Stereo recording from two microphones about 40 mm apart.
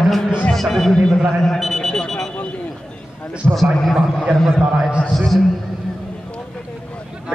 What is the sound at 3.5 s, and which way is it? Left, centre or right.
Speech, centre.